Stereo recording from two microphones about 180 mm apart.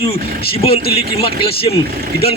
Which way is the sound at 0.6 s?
30° left (ahead or behind).